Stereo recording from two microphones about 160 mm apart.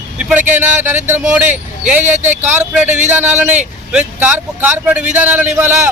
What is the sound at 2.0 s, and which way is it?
Speech, 50° right (ahead or behind).